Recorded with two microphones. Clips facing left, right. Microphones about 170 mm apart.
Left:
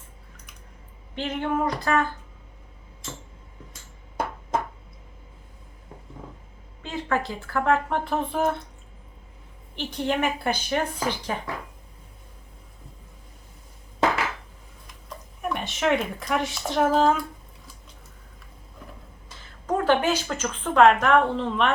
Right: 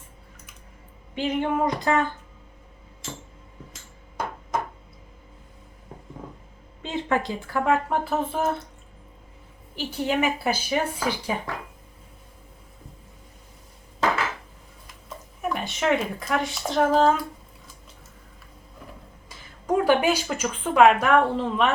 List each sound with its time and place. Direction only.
1.1 s speech: 10° right (ahead or behind)
6.8 s speech: 20° right (ahead or behind); by 8.6 s 5° right (ahead or behind)
9.7 s speech: 5° right (ahead or behind)
15.4 s speech: centre (ahead or behind)
19.3 s speech: 10° right (ahead or behind)